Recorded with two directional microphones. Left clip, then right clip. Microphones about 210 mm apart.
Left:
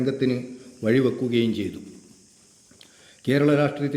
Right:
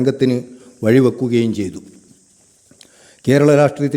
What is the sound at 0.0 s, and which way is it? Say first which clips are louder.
A man's voice: right 8 dB; 55° right (ahead or behind).